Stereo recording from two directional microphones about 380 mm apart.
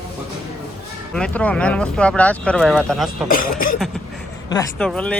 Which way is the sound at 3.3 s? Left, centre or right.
Left.